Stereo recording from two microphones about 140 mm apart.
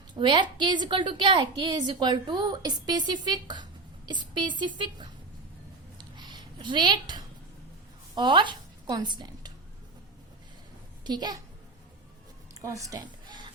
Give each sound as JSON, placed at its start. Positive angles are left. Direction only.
{"t": 0.2, "sound": "a woman's voice", "side_deg": -35}
{"t": 6.0, "sound": "a sound", "side_deg": -30}
{"t": 8.1, "sound": "a woman's voice", "side_deg": -30}
{"t": 11.0, "sound": "a child's voice", "side_deg": -30}
{"t": 12.6, "sound": "speech", "side_deg": -25}